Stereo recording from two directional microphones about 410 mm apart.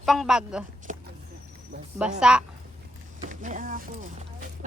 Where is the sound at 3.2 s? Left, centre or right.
Centre.